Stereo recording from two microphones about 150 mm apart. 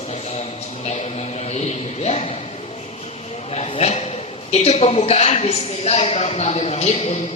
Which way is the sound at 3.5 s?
45° left (ahead or behind).